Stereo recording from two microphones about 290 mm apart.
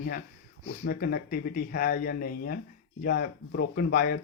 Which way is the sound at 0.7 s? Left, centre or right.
Left.